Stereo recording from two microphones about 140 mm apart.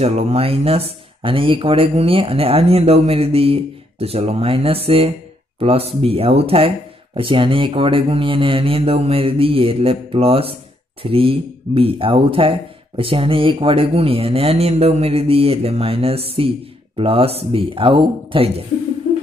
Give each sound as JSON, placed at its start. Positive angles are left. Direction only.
{"t": 0.0, "sound": "speech", "side_deg": -50}